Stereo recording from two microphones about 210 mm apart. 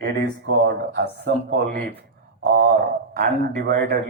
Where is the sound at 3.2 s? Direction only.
45° right (ahead or behind).